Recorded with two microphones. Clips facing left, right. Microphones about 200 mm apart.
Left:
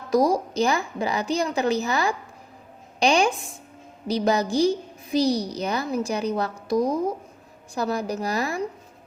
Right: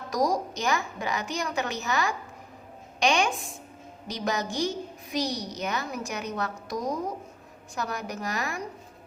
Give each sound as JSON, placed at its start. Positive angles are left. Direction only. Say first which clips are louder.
{"t": 0.1, "sound": "a woman's voice", "louder": "left 6 dB", "side_deg": 30}
{"t": 7.8, "sound": "a woman's voice", "louder": "left 7 dB", "side_deg": 30}